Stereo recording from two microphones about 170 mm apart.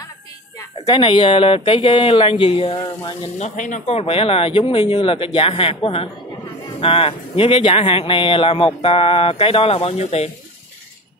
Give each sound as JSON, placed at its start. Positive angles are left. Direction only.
{"t": 0.8, "sound": "speech", "side_deg": 30}
{"t": 3.3, "sound": "speech", "side_deg": 45}